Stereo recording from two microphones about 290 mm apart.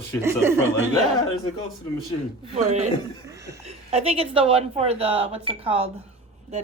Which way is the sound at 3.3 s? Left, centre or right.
Centre.